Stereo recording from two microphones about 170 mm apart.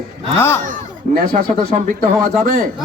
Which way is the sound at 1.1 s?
55° right (ahead or behind).